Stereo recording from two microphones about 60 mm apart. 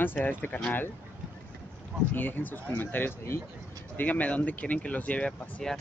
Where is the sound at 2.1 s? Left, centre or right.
Left.